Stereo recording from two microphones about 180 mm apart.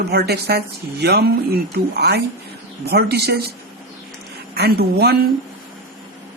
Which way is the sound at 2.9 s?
65° right (ahead or behind).